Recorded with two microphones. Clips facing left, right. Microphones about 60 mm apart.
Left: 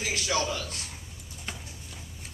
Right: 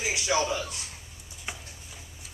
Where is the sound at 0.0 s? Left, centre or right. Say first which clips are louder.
Right 2 dB; centre.